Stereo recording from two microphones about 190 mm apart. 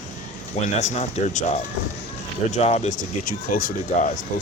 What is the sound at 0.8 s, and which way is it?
Speech, 35° left (ahead or behind).